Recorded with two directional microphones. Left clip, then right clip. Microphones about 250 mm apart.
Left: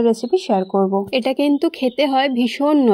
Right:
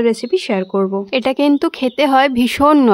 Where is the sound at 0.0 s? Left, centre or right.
Centre.